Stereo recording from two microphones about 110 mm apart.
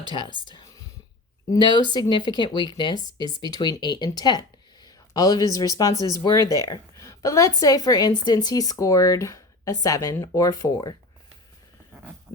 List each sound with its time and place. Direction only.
0.1 s speech: 45° left (ahead or behind)